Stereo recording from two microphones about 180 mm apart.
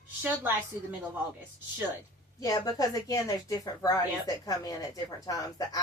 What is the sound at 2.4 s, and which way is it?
A woman's voice, 20° left (ahead or behind).